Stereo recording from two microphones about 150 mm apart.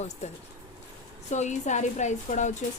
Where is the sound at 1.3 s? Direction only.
50° left (ahead or behind).